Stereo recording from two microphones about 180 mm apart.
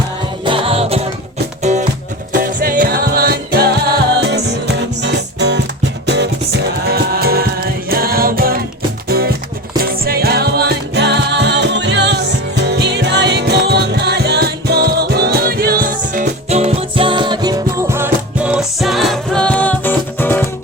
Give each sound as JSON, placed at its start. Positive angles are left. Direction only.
{"t": 0.4, "sound": "music", "side_deg": -30}